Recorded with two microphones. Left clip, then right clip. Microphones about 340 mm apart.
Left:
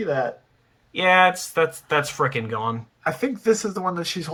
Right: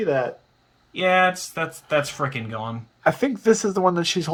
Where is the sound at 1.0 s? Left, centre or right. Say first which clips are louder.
Left 2 dB; centre.